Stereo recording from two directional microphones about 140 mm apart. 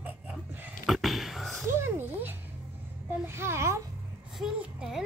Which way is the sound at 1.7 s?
15° right (ahead or behind).